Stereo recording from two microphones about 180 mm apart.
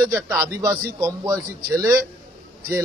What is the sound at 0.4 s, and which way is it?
Speech, 20° right (ahead or behind).